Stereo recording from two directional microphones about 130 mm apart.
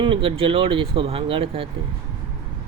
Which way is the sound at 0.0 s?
45° right (ahead or behind).